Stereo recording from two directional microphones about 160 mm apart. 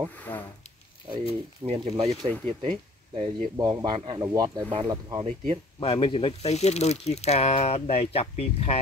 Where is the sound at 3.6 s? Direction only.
25° right (ahead or behind).